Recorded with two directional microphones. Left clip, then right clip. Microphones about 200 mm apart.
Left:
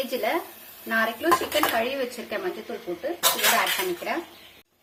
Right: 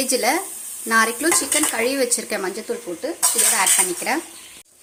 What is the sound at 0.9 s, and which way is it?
Speech, 45° right (ahead or behind).